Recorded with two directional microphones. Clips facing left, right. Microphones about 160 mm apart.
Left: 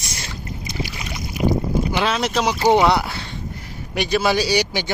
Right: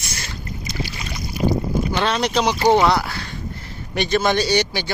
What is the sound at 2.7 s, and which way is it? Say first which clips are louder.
Speech: even; 15° left (ahead or behind).